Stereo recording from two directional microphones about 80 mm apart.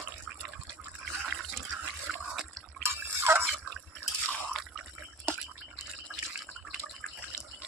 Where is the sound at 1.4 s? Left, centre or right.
Centre.